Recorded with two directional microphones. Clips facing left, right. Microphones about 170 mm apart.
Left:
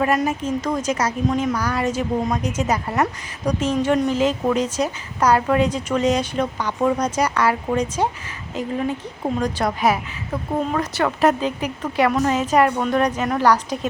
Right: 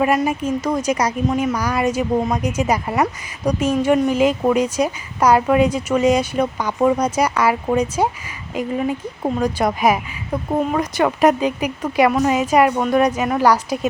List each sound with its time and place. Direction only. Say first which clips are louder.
0.0 s a woman's voice: right 2 dB; 5° right (ahead or behind)